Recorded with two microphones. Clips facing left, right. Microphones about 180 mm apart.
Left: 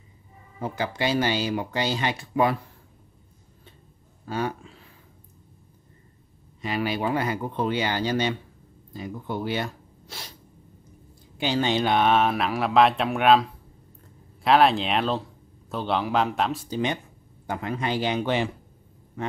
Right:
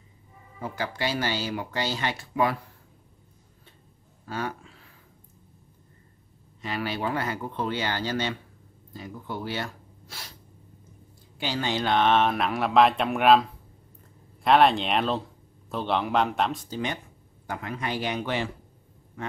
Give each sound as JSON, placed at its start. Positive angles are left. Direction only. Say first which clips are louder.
{"t": 0.6, "sound": "speech", "louder": "left 3 dB", "side_deg": 20}
{"t": 4.3, "sound": "speech", "louder": "left 4 dB", "side_deg": 20}
{"t": 6.6, "sound": "speech", "louder": "left 3 dB", "side_deg": 15}
{"t": 11.3, "sound": "speech", "louder": "left 5 dB", "side_deg": 20}
{"t": 16.7, "sound": "speech", "louder": "left 4 dB", "side_deg": 20}